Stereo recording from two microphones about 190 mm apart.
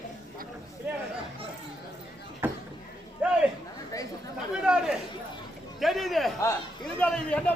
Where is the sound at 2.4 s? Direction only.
10° right (ahead or behind).